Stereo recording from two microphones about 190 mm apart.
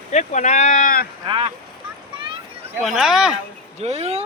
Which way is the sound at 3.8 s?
30° right (ahead or behind).